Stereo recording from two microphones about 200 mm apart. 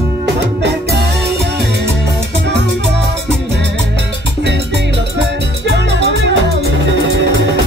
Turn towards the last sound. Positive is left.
turn(degrees=-60)  # may be behind; listen again after turning